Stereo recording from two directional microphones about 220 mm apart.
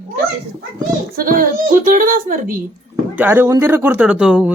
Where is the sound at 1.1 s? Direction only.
40° right (ahead or behind).